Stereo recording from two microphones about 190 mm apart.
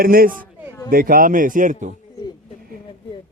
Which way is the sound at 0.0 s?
50° right (ahead or behind).